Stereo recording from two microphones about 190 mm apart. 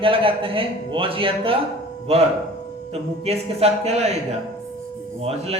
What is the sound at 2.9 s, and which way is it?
A man's voice, 35° right (ahead or behind).